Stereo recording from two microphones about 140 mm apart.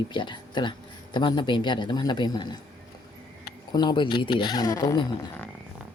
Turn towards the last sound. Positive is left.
turn(degrees=30)  # may be behind; listen again after turning